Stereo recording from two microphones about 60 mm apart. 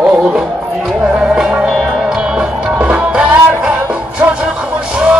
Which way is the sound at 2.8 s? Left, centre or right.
Right.